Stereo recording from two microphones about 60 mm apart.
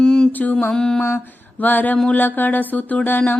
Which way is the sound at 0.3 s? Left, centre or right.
Left.